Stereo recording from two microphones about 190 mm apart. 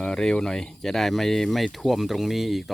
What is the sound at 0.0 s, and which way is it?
Speech, 5° left (ahead or behind).